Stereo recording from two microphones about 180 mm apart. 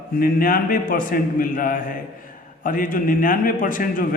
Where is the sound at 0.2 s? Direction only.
55° left (ahead or behind).